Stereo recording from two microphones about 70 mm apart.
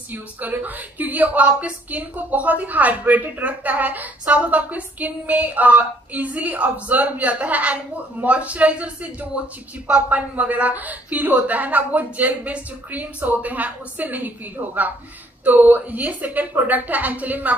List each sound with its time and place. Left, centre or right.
0.1 s a woman's voice: right